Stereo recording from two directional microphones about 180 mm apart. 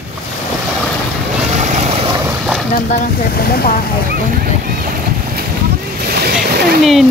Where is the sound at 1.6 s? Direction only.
40° right (ahead or behind).